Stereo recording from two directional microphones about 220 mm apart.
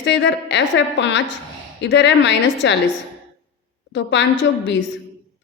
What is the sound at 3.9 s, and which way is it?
Speech, 55° left (ahead or behind).